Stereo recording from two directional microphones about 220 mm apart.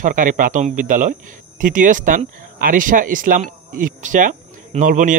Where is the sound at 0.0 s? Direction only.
35° right (ahead or behind).